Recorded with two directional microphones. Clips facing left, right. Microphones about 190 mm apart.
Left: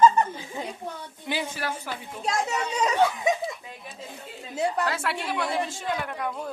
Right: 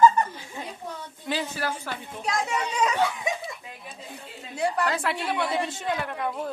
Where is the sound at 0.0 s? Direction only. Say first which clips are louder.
Even; 20° left (ahead or behind).